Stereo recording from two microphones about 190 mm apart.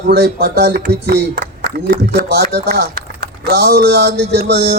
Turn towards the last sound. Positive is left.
turn(degrees=-60)  # may be behind; listen again after turning